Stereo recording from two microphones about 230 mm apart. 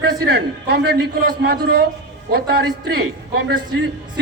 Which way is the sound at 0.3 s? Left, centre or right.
Right.